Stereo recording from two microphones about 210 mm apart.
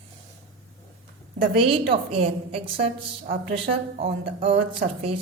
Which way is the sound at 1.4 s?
25° right (ahead or behind).